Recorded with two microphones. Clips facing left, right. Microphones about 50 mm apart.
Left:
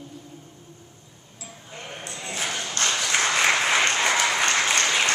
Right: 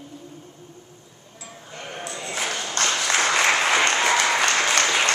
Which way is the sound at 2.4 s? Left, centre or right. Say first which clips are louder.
Even; right.